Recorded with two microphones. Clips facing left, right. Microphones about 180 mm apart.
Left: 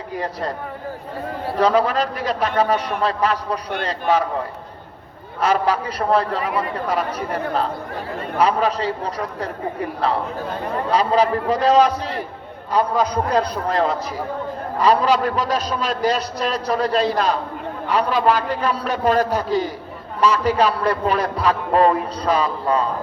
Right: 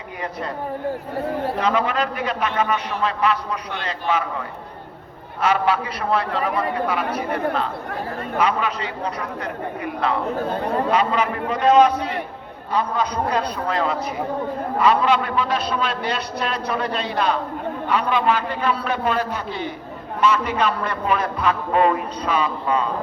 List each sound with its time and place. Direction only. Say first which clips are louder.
1.5 s a man's voice: left 7 dB; 35° left (ahead or behind)
5.4 s a man's voice: left 1 dB; 40° left (ahead or behind)
10.9 s a man's voice: left 3 dB; 35° left (ahead or behind)